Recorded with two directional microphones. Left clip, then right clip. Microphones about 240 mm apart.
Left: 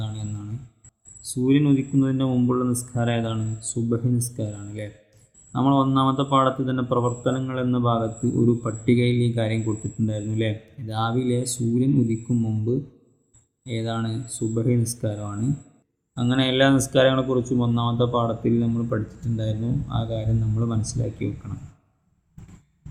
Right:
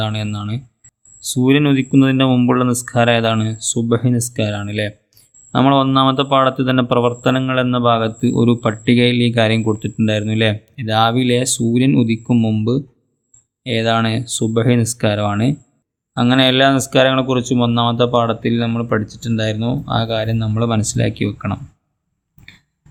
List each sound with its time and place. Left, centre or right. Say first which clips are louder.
0.0 s speech: right 15 dB; right